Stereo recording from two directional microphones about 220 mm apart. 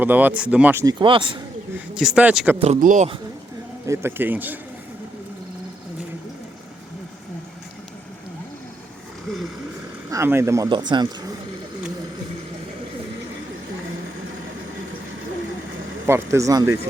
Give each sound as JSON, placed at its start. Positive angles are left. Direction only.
{"t": 0.0, "sound": "speech", "side_deg": -10}
{"t": 2.0, "sound": "speech", "side_deg": -5}
{"t": 2.6, "sound": "speech", "side_deg": -30}
{"t": 3.8, "sound": "speech", "side_deg": -10}
{"t": 10.1, "sound": "speech", "side_deg": -10}
{"t": 16.0, "sound": "speech", "side_deg": -10}